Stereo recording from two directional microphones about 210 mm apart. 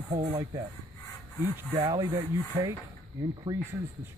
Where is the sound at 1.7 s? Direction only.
20° right (ahead or behind).